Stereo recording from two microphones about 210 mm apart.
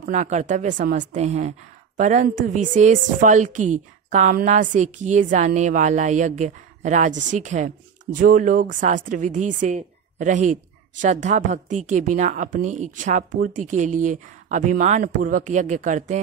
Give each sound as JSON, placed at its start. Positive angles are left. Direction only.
{"t": 0.0, "sound": "a woman's voice", "side_deg": -35}